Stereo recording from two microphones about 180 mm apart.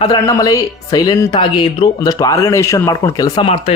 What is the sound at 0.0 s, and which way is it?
Speech, 20° left (ahead or behind).